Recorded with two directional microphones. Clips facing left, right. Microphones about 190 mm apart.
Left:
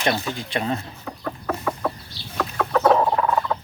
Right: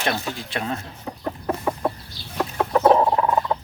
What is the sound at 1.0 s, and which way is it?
Chicken, 20° right (ahead or behind).